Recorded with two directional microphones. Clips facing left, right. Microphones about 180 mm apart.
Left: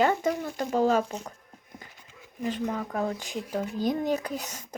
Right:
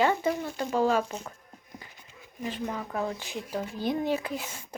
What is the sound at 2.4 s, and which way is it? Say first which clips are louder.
Speech: left 3 dB; 40° left (ahead or behind).